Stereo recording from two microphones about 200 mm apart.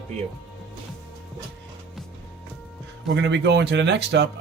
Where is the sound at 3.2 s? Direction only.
60° right (ahead or behind).